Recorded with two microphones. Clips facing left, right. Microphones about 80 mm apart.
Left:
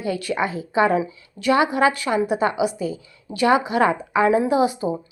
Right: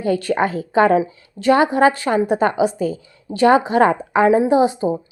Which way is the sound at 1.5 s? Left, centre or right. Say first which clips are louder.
Right 4 dB; right.